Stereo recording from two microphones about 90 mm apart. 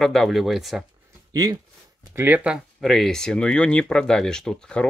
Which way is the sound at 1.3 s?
45° right (ahead or behind).